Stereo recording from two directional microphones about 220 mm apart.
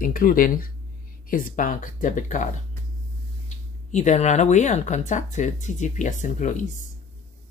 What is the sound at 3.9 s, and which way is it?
Speech, 30° left (ahead or behind).